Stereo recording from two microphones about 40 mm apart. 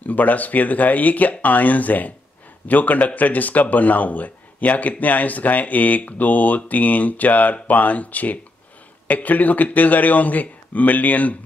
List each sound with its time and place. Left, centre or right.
0.0 s speech: left